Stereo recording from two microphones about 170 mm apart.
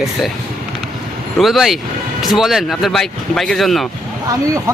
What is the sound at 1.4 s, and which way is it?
Speech, centre (ahead or behind).